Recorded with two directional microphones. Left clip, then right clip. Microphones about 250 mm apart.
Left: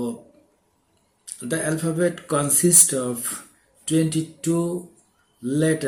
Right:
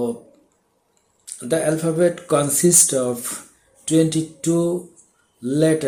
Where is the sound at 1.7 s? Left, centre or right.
Centre.